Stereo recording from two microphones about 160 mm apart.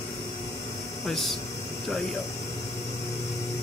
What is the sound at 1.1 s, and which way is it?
Speech, centre (ahead or behind).